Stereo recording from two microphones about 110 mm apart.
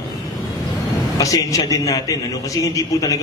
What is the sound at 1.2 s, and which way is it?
A man's voice, 30° left (ahead or behind).